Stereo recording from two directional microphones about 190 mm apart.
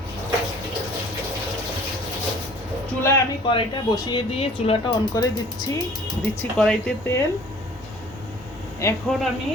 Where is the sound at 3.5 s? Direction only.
25° left (ahead or behind).